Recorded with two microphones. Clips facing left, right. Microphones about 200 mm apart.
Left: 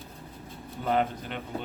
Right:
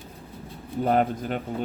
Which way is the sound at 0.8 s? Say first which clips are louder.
Right 5 dB; 45° right (ahead or behind).